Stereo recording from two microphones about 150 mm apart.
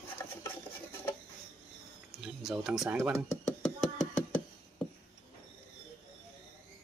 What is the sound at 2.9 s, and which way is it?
Speech, 15° right (ahead or behind).